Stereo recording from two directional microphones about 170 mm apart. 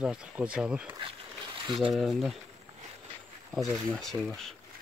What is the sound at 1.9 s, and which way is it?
Speech, centre (ahead or behind).